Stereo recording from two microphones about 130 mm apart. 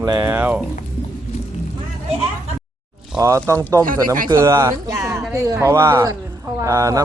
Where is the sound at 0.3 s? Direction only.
15° right (ahead or behind).